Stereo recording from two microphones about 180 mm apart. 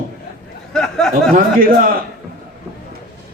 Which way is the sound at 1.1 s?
50° right (ahead or behind).